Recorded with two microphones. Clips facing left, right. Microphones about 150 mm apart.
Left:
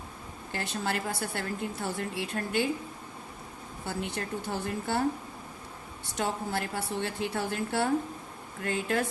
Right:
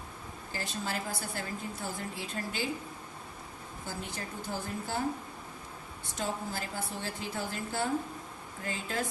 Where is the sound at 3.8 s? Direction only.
65° left (ahead or behind).